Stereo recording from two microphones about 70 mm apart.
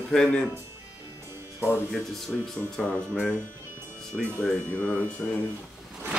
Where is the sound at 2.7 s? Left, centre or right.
Centre.